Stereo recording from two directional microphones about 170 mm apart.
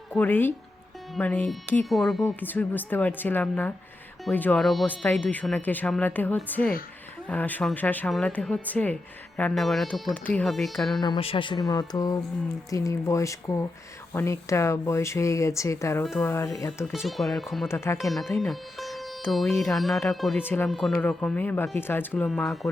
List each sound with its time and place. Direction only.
0.1 s speech: 10° left (ahead or behind)
11.0 s speech: 30° left (ahead or behind)
16.9 s speech: centre (ahead or behind)
17.7 s speech: 15° left (ahead or behind)
18.3 s speech: centre (ahead or behind)
20.7 s speech: centre (ahead or behind)
22.3 s speech: centre (ahead or behind)